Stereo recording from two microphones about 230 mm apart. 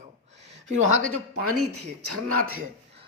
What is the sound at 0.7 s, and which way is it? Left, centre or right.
Speech, right.